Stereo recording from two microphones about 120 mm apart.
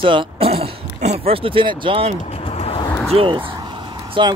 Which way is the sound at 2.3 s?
55° left (ahead or behind).